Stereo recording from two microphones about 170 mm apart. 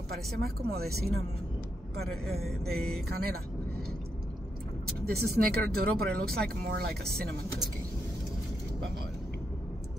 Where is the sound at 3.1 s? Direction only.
65° right (ahead or behind).